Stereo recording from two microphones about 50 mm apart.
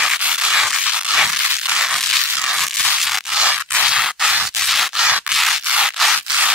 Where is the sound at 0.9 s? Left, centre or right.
Centre.